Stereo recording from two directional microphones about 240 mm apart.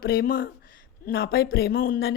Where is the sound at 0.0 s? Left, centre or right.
Left.